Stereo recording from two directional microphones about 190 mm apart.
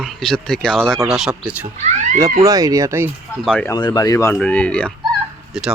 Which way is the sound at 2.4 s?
20° right (ahead or behind).